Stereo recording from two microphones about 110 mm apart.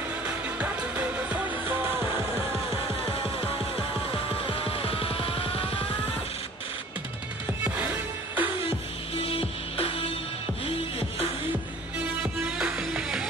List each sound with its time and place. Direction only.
0.2 s music: 10° right (ahead or behind)
4.5 s music: 60° left (ahead or behind)
7.6 s music: 15° right (ahead or behind)
9.2 s music: 60° left (ahead or behind)
12.4 s music: 5° right (ahead or behind)